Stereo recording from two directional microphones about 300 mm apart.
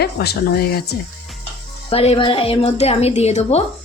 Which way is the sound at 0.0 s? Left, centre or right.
Left.